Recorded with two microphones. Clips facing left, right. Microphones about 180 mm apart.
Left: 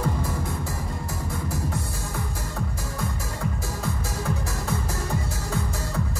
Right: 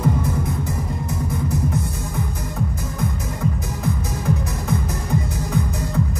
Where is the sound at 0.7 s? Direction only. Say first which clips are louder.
Right 6 dB; 20° right (ahead or behind).